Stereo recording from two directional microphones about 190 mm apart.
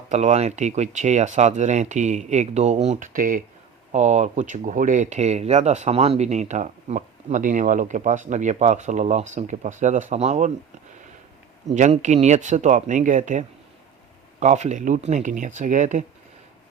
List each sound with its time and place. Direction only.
0.1 s speech: 35° right (ahead or behind)
11.7 s speech: 40° right (ahead or behind)